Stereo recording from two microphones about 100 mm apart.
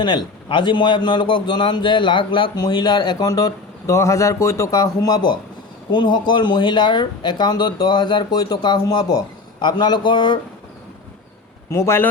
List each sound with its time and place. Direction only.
0.0 s a man's voice: 55° left (ahead or behind)
11.7 s a man's voice: 25° left (ahead or behind)